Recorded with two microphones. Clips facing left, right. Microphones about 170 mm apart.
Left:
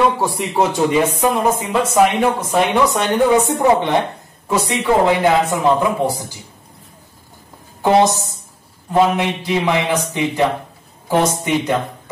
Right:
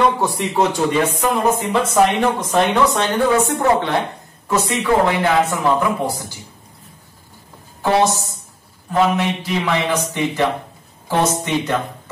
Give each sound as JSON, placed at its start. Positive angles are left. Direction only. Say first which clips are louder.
{"t": 0.0, "sound": "speech", "louder": "even", "side_deg": 10}
{"t": 7.8, "sound": "speech", "louder": "left 3 dB", "side_deg": 15}